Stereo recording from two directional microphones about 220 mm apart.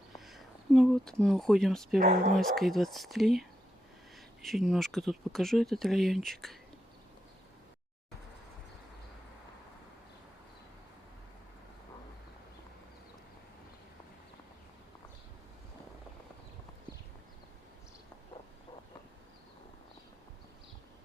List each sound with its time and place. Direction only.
0.3 s a sound: centre (ahead or behind)
1.2 s speech: centre (ahead or behind)
4.4 s speech: centre (ahead or behind)